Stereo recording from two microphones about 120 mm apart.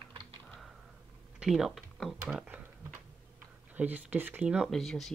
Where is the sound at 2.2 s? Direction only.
10° right (ahead or behind).